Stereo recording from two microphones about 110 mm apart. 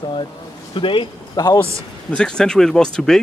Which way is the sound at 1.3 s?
35° left (ahead or behind).